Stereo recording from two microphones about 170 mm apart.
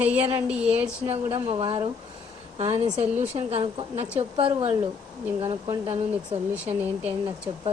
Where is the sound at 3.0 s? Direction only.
10° right (ahead or behind).